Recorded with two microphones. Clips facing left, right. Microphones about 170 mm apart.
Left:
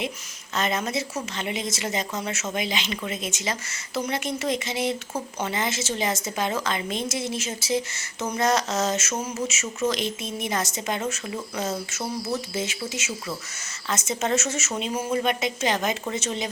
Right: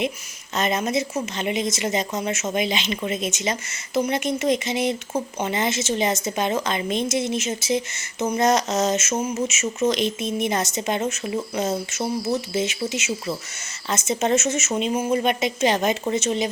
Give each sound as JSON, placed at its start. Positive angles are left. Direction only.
{"t": 0.5, "sound": "speech", "side_deg": -20}